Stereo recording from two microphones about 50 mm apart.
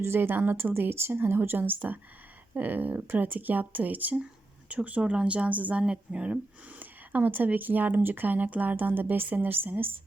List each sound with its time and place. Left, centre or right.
0.0 s a woman's voice: right
5.8 s a woman's voice: right
6.7 s speech: right
8.7 s speech: right